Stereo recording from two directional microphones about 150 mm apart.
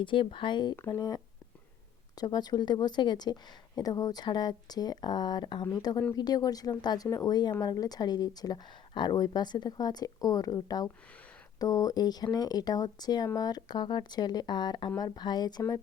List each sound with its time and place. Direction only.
0.0 s speech: 35° left (ahead or behind)